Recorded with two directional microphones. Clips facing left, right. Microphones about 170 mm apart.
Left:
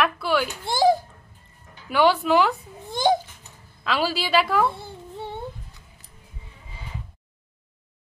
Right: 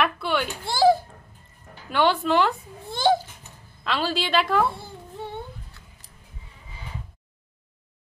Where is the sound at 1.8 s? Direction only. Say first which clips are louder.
Left 2 dB; 5° left (ahead or behind).